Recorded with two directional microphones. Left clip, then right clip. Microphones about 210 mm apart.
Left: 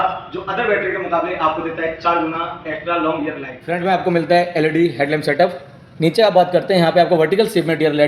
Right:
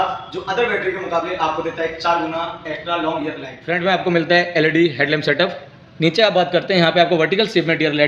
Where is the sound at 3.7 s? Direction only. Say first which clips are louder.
Even; 20° right (ahead or behind).